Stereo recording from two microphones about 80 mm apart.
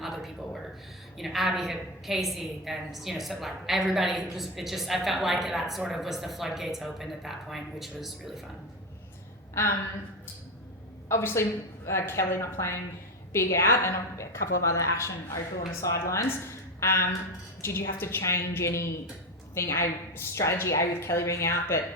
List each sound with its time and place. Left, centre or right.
0.0 s a sound: centre
1.2 s a woman's voice: centre
11.1 s a woman's voice: left